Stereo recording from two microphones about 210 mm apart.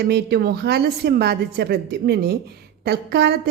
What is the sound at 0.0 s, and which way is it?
A woman's voice, 50° right (ahead or behind).